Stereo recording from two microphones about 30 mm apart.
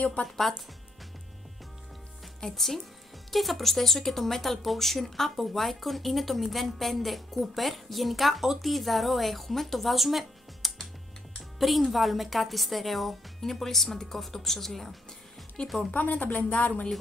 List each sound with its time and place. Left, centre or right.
2.5 s speech: centre
11.9 s speech: centre
15.6 s speech: left
15.9 s speech: left